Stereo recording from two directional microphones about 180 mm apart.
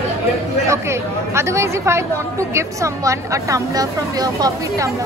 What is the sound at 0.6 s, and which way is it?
Speech, 15° right (ahead or behind).